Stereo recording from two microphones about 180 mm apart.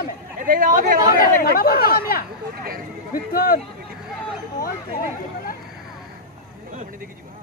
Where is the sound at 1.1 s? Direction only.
55° left (ahead or behind).